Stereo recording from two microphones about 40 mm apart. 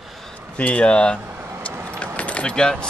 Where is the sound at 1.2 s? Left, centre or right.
Right.